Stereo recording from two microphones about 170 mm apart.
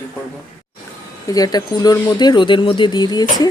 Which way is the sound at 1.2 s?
20° left (ahead or behind).